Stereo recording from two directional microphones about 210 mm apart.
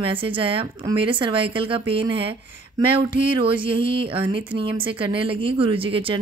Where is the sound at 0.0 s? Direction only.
25° right (ahead or behind).